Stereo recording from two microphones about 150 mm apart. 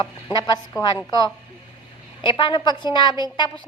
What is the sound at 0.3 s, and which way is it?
Speech, 25° left (ahead or behind).